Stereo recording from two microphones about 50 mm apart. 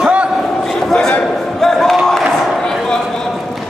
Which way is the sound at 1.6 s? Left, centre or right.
Centre.